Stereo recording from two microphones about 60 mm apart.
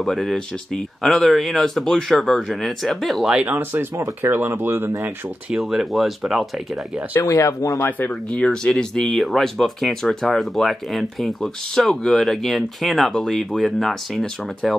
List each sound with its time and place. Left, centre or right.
0.0 s speech: centre
3.4 s speech: right
3.9 s speech: right
5.5 s speech: centre
7.2 s speech: left
8.1 s speech: centre